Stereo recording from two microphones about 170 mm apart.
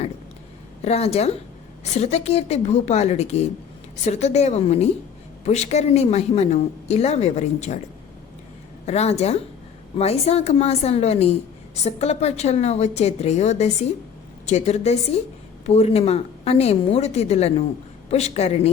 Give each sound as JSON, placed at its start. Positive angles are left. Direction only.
{"t": 0.8, "sound": "a woman's voice", "side_deg": 40}
{"t": 8.9, "sound": "a woman's voice", "side_deg": 40}